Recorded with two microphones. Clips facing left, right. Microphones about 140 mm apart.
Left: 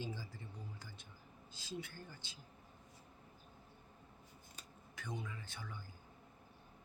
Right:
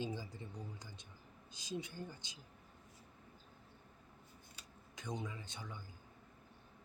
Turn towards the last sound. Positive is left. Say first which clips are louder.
# right 2 dB
turn(degrees=-20)  # may be behind; listen again after turning